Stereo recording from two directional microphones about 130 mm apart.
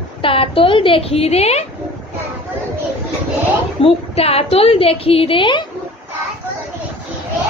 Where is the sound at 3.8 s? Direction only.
50° left (ahead or behind).